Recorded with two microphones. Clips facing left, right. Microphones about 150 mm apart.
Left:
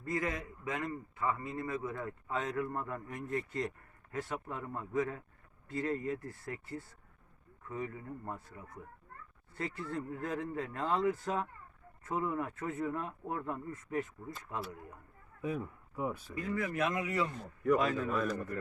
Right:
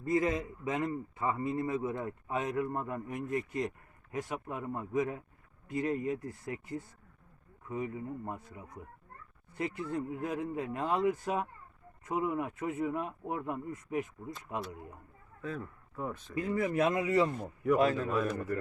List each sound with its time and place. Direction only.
0.0 s a man's voice: 20° right (ahead or behind)
15.4 s speech: 15° left (ahead or behind)
16.4 s a man's voice: 30° right (ahead or behind)